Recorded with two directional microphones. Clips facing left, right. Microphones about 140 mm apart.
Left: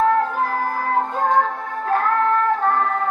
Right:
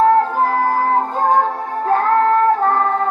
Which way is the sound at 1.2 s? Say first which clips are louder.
Right 3 dB; 25° right (ahead or behind).